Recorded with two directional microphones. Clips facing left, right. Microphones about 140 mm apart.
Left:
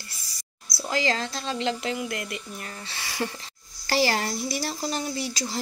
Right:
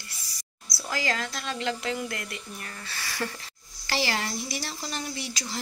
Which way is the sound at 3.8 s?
40° left (ahead or behind).